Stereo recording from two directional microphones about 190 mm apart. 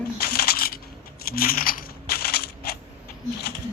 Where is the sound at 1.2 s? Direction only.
50° left (ahead or behind).